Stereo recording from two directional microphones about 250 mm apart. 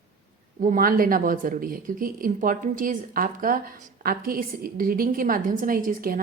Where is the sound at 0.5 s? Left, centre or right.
Right.